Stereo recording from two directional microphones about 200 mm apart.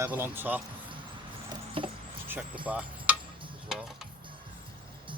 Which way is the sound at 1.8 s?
25° right (ahead or behind).